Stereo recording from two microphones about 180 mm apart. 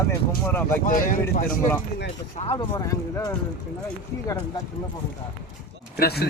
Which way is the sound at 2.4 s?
30° left (ahead or behind).